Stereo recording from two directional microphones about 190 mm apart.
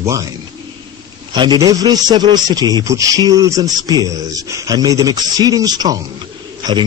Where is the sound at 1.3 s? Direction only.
20° right (ahead or behind).